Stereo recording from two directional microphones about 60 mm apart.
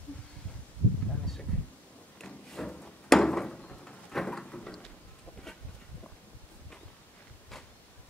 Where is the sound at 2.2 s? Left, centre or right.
Centre.